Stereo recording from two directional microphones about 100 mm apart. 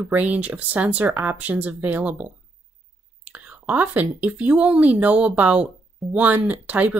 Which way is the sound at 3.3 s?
15° right (ahead or behind).